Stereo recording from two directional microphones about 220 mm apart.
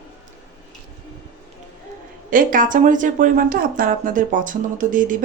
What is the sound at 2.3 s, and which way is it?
Speech, 40° right (ahead or behind).